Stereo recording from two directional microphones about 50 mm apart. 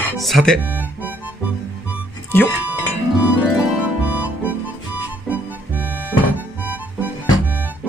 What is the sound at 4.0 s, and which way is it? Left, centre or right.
Music, right.